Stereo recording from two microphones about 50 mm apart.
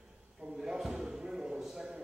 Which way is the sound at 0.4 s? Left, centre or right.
Centre.